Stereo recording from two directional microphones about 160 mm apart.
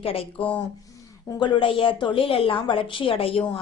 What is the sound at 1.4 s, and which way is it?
A woman's voice, 30° left (ahead or behind).